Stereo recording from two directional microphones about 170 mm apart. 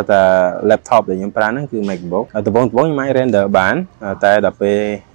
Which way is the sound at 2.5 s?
25° right (ahead or behind).